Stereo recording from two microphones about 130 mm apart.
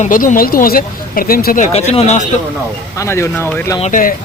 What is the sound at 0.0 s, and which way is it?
Speech, 80° left.